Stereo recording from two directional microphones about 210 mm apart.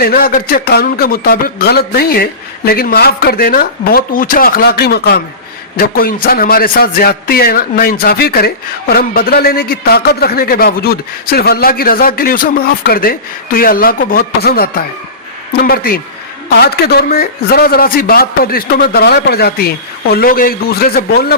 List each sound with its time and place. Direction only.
0.0 s a man's voice: 45° left (ahead or behind)